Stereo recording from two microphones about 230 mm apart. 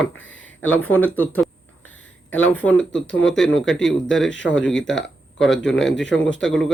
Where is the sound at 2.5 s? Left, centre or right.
Centre.